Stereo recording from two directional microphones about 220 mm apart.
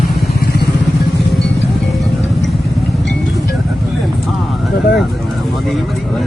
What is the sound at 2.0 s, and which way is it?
Music, centre (ahead or behind).